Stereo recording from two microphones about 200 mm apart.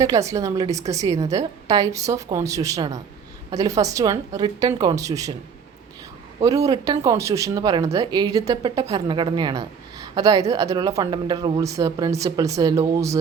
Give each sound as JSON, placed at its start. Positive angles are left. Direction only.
{"t": 0.0, "sound": "speech", "side_deg": -15}
{"t": 6.4, "sound": "a woman's voice", "side_deg": -15}